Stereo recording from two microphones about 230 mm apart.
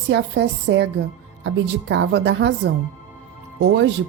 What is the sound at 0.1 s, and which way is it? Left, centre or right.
Music, right.